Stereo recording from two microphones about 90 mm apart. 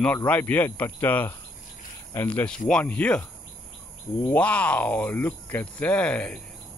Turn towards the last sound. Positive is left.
turn(degrees=15)  # may be behind; listen again after turning